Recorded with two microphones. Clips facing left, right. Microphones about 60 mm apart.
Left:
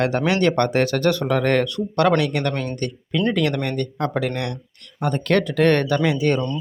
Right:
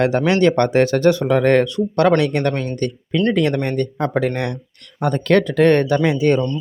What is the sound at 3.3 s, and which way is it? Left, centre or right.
Speech, right.